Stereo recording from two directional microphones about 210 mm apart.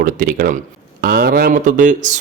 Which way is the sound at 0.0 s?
45° right (ahead or behind).